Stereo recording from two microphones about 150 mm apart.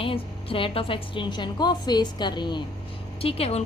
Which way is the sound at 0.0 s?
35° left (ahead or behind).